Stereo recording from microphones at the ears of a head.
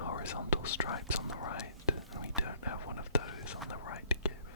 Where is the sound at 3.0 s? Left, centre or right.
Left.